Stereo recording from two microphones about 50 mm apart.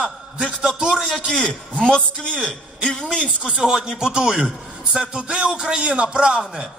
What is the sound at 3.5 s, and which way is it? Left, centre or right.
A man's voice, centre.